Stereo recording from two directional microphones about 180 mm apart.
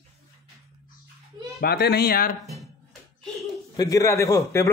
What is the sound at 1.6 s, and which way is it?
Speech, 65° left (ahead or behind).